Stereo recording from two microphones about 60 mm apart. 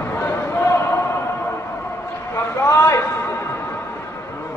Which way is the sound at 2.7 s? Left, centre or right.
Left.